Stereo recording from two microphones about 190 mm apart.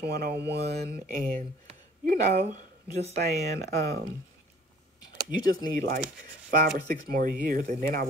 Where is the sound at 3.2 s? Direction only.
60° right (ahead or behind).